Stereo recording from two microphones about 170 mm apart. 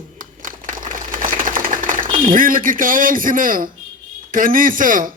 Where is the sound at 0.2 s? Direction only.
50° right (ahead or behind).